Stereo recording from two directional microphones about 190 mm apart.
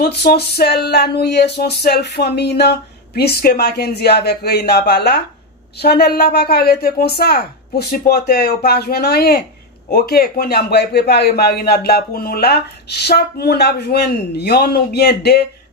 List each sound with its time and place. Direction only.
0.0 s a man's voice: 55° left (ahead or behind)